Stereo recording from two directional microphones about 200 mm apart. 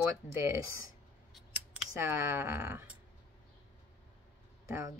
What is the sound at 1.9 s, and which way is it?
A woman's voice, 15° right (ahead or behind).